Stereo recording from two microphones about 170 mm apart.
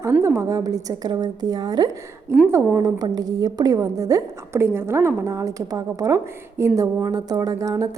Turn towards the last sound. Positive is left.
turn(degrees=-20)  # may be behind; listen again after turning